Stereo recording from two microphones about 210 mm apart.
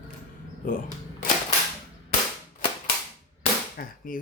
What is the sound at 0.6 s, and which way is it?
Speech, 40° left (ahead or behind).